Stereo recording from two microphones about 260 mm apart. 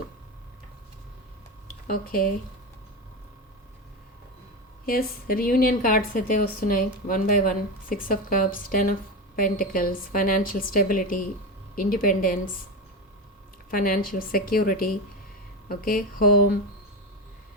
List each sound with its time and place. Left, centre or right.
1.9 s a woman's voice: left
4.9 s a woman's voice: left
13.7 s a woman's voice: left